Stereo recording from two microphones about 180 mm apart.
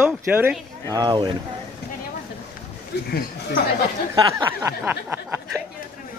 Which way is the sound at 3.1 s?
55° left (ahead or behind).